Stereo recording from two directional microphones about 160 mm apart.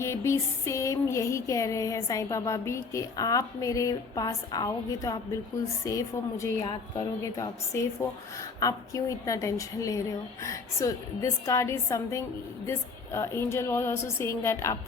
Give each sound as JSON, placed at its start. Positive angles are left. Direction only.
{"t": 0.0, "sound": "music", "side_deg": 15}
{"t": 12.6, "sound": "a woman's voice", "side_deg": 15}